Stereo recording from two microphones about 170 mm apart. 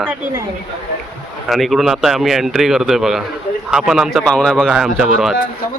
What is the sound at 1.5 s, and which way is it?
A man's voice, centre (ahead or behind).